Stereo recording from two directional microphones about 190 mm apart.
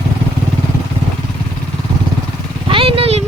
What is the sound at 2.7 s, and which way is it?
Vehicle, 30° right (ahead or behind).